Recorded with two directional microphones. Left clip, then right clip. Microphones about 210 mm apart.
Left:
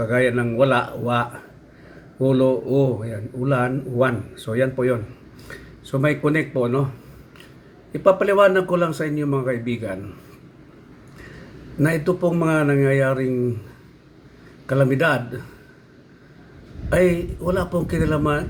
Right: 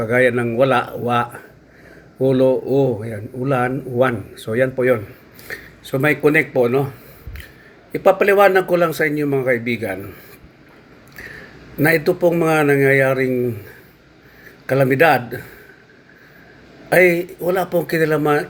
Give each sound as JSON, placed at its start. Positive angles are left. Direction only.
{"t": 0.1, "sound": "speech", "side_deg": -5}
{"t": 2.5, "sound": "speech", "side_deg": -30}
{"t": 3.0, "sound": "speech", "side_deg": -5}
{"t": 8.0, "sound": "speech", "side_deg": -5}
{"t": 11.8, "sound": "speech", "side_deg": -5}
{"t": 14.7, "sound": "speech", "side_deg": -5}
{"t": 16.9, "sound": "speech", "side_deg": -5}